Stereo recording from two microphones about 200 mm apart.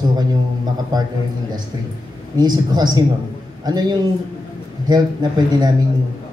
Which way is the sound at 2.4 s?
20° right (ahead or behind).